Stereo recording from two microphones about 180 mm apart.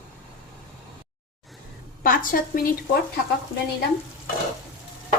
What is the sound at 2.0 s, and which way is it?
Speech, 55° left (ahead or behind).